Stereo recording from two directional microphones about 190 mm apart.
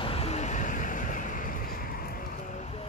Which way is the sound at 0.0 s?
30° left (ahead or behind).